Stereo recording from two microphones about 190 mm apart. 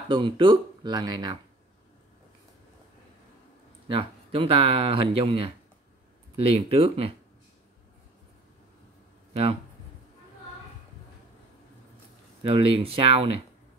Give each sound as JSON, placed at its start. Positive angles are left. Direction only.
{"t": 0.1, "sound": "speech", "side_deg": -25}
{"t": 3.8, "sound": "speech", "side_deg": -30}
{"t": 9.3, "sound": "speech", "side_deg": -30}
{"t": 12.4, "sound": "speech", "side_deg": -30}